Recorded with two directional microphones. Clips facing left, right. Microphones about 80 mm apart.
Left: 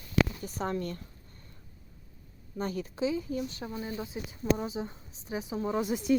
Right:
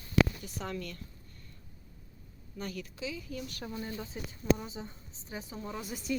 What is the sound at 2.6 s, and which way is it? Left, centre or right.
Speech, left.